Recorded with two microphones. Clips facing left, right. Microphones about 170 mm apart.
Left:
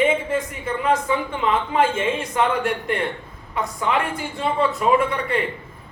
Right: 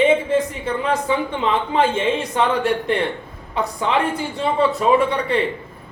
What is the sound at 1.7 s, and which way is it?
A woman's voice, 30° right (ahead or behind).